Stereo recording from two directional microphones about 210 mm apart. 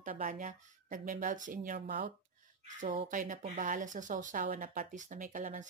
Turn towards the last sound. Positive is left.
turn(degrees=-40)  # may be behind; listen again after turning